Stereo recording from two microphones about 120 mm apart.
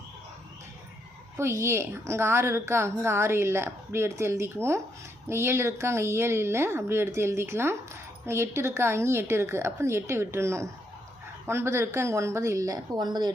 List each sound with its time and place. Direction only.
1.4 s a woman's voice: 25° right (ahead or behind)